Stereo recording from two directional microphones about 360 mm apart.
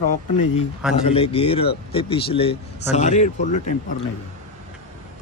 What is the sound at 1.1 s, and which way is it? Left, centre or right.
Speech, centre.